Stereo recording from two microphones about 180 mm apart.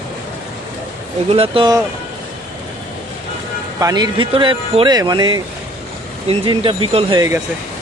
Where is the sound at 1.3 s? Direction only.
30° right (ahead or behind).